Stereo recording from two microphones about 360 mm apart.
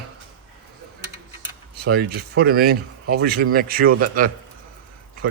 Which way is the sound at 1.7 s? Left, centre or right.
Right.